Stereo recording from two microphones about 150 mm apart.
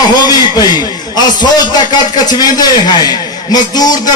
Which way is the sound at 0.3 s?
25° left (ahead or behind).